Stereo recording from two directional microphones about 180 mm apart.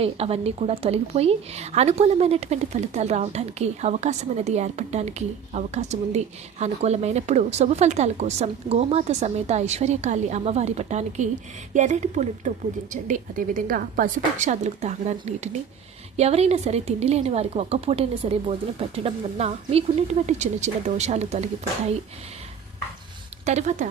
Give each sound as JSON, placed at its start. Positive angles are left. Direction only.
{"t": 0.0, "sound": "a woman's voice", "side_deg": -35}
{"t": 16.1, "sound": "a woman's voice", "side_deg": -35}
{"t": 23.5, "sound": "a woman's voice", "side_deg": -40}